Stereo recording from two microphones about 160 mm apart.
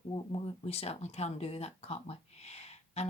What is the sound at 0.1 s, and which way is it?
Speech, 35° left (ahead or behind).